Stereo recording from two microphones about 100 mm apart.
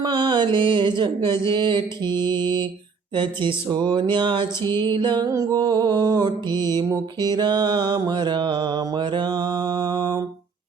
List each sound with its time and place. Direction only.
0.0 s mantra: 55° right (ahead or behind)
5.3 s music: 35° right (ahead or behind)
6.5 s mantra: 45° right (ahead or behind)